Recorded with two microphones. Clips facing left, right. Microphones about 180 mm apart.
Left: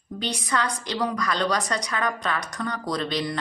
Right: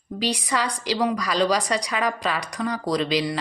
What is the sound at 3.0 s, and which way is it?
Speech, 90° right.